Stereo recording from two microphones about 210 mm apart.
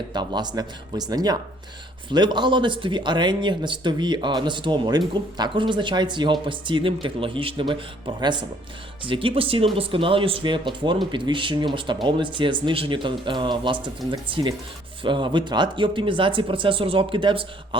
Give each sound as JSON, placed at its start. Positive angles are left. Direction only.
{"t": 0.1, "sound": "speech", "side_deg": -20}